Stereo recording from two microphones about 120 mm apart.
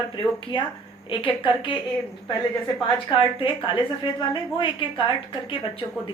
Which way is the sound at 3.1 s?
40° left (ahead or behind).